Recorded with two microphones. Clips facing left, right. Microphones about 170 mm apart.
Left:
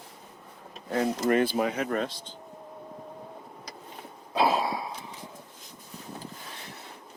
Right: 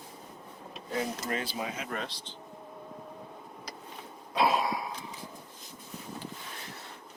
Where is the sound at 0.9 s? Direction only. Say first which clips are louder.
Left 9 dB; 60° left (ahead or behind).